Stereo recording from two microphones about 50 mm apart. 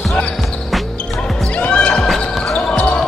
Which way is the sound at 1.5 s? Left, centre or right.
Left.